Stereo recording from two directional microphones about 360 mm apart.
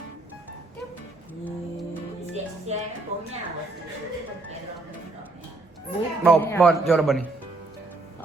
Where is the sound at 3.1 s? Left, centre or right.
Centre.